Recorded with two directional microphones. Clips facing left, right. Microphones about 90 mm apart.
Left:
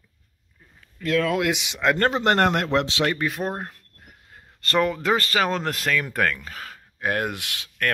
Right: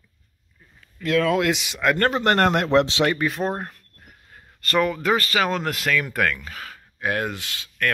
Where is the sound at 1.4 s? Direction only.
20° left (ahead or behind).